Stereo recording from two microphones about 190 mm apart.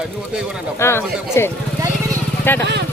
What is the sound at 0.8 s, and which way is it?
Speech, 15° left (ahead or behind).